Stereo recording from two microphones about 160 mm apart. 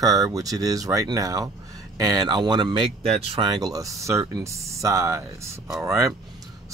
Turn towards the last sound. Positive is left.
turn(degrees=-15)  # may be behind; listen again after turning